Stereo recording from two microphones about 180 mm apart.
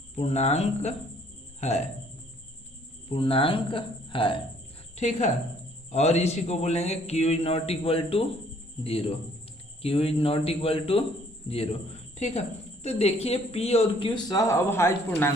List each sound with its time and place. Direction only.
0.2 s a woman's voice: 35° left (ahead or behind)
3.1 s speech: 30° left (ahead or behind)
4.9 s a woman's voice: 40° left (ahead or behind); by 15.3 s 15° left (ahead or behind)